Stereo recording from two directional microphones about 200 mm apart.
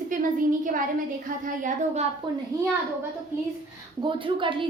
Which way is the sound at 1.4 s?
40° right (ahead or behind).